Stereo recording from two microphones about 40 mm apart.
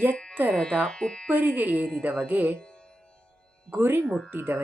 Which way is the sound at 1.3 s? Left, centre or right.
Right.